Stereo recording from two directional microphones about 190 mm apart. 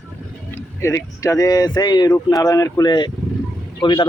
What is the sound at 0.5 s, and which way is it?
Speech, 15° left (ahead or behind).